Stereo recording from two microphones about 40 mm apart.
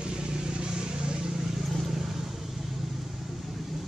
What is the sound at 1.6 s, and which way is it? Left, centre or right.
Vehicle, centre.